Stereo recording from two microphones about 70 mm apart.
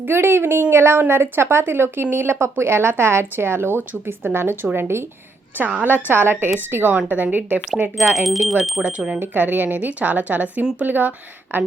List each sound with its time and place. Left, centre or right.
0.0 s a woman's voice: right
5.5 s speech: right
7.9 s speech: centre
8.8 s speech: centre
9.2 s speech: right